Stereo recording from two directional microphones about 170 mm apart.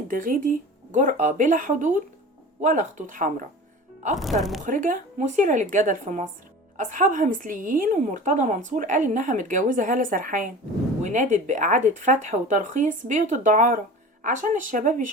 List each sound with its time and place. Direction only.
0.1 s a woman's voice: 50° right (ahead or behind)
4.2 s speech: centre (ahead or behind)
4.6 s a woman's voice: 50° right (ahead or behind)